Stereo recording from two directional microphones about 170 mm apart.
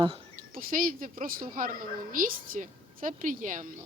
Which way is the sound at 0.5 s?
55° right (ahead or behind).